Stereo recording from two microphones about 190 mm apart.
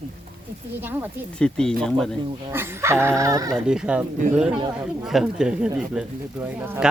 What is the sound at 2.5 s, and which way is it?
Speech, 10° right (ahead or behind).